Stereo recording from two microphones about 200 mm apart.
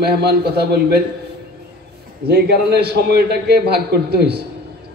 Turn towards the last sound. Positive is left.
turn(degrees=-55)  # may be behind; listen again after turning